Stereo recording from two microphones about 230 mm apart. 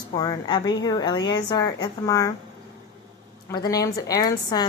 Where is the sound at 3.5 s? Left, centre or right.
Centre.